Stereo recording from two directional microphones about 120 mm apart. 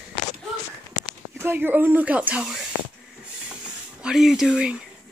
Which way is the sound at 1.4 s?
15° right (ahead or behind).